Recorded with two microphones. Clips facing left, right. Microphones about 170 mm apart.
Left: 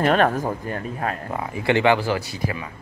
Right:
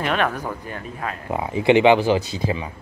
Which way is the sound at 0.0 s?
40° left (ahead or behind).